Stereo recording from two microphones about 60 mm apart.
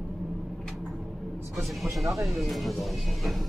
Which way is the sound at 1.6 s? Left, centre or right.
Centre.